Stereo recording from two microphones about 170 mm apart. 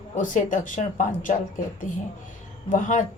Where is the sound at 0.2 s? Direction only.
50° left (ahead or behind).